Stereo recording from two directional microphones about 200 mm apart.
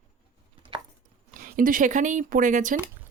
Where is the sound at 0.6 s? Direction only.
25° right (ahead or behind).